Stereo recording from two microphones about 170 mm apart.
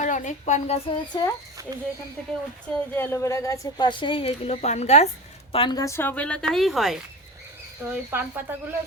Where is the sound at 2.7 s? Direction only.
15° left (ahead or behind); by 5.0 s 40° left (ahead or behind).